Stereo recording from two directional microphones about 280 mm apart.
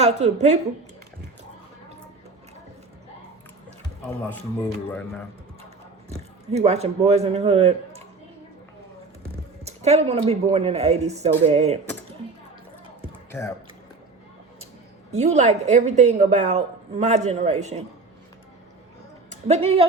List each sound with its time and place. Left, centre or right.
0.0 s a woman's voice: right
4.9 s speech: centre
6.5 s a woman's voice: right
9.6 s a woman's voice: right
15.1 s a woman's voice: right
19.3 s speech: right